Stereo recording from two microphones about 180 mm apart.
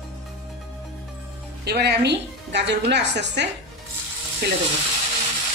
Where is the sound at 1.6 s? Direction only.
65° right (ahead or behind).